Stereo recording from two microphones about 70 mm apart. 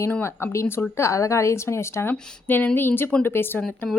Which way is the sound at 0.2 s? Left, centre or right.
Left.